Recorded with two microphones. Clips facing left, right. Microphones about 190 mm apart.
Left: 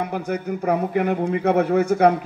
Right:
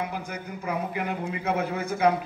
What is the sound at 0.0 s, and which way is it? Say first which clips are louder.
A man's voice: left 8 dB; 60° left (ahead or behind).